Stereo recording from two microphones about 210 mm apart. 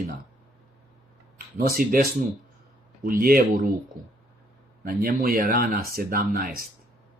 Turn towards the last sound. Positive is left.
turn(degrees=-40)  # may be behind; listen again after turning